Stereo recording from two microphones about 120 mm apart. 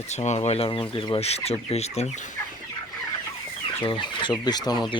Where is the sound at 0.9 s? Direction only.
45° left (ahead or behind); by 2.1 s 60° left (ahead or behind).